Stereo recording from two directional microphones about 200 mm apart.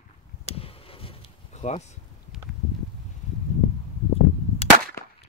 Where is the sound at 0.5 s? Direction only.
30° left (ahead or behind).